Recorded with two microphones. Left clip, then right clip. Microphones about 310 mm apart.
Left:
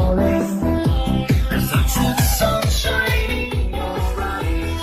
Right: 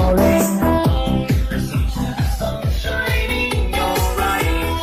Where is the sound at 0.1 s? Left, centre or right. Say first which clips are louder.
Right 4 dB; right.